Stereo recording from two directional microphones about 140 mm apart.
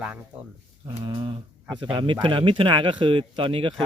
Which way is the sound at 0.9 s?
35° right (ahead or behind).